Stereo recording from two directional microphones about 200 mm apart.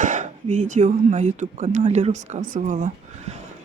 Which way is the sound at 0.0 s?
40° right (ahead or behind).